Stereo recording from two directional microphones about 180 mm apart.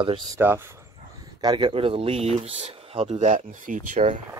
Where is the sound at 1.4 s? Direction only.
25° right (ahead or behind); by 4.2 s 45° right (ahead or behind).